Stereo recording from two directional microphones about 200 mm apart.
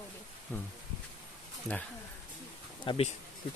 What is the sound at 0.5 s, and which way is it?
Speech, 10° left (ahead or behind).